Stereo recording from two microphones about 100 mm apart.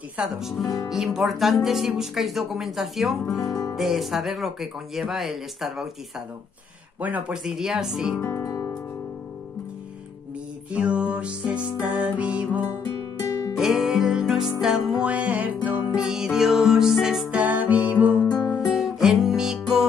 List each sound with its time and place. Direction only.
0.2 s music: 5° right (ahead or behind)
7.0 s music: 15° right (ahead or behind)
7.4 s music: 5° right (ahead or behind)
8.4 s music: 30° left (ahead or behind)
10.7 s music: 10° right (ahead or behind)
13.3 s music: 35° left (ahead or behind)
13.6 s music: 5° right (ahead or behind)
17.3 s music: 15° right (ahead or behind)
18.7 s music: centre (ahead or behind)